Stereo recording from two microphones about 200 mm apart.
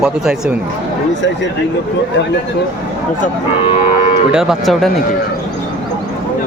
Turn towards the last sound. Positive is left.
turn(degrees=0)  # may be behind; listen again after turning